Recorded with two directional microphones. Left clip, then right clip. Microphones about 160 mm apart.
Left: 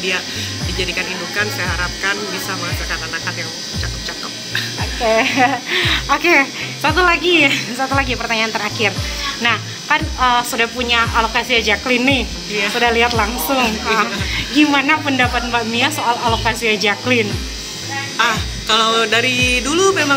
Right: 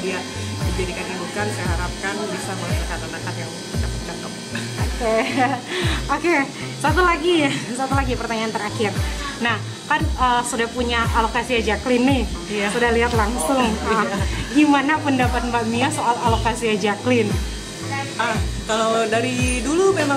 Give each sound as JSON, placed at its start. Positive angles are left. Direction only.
{"t": 5.0, "sound": "speech", "side_deg": 40}
{"t": 5.7, "sound": "speech", "side_deg": 15}
{"t": 18.1, "sound": "music", "side_deg": -10}